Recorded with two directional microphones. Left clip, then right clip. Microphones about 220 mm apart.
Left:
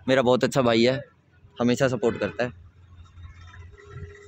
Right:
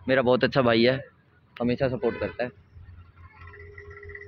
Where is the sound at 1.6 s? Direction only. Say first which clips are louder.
Left 3 dB; 35° left (ahead or behind).